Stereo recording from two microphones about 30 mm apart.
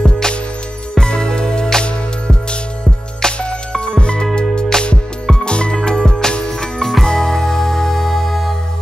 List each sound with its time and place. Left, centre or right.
0.0 s music: left
3.7 s music: left
4.0 s music: left
4.7 s music: left
5.4 s music: left
6.8 s music: centre
7.1 s music: left